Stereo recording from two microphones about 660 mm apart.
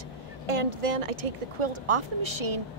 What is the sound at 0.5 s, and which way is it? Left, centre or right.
A woman's voice, right.